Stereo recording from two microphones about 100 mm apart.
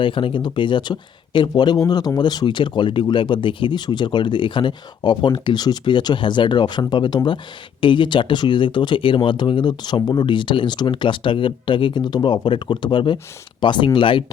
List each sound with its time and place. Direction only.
0.0 s speech: 60° left (ahead or behind)